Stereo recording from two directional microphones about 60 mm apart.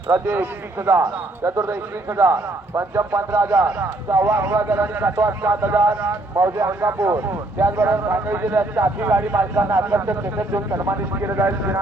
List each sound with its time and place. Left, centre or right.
0.1 s a man's voice: right